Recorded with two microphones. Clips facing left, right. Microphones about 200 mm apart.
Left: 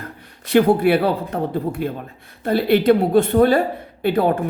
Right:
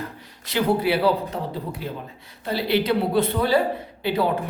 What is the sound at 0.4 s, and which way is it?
Speech, 55° left (ahead or behind).